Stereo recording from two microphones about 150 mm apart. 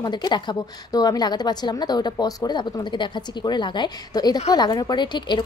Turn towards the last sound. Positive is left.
turn(degrees=30)  # may be behind; listen again after turning